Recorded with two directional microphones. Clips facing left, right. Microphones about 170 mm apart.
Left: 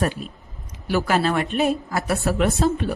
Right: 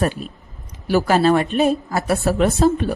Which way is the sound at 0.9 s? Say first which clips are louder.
Right 5 dB; 35° right (ahead or behind).